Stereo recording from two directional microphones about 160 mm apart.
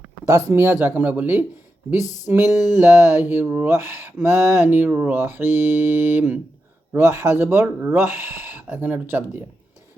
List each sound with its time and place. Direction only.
0.3 s speech: 15° right (ahead or behind)